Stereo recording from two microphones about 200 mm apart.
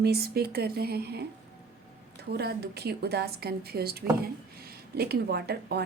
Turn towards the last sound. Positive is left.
turn(degrees=-55)  # may be behind; listen again after turning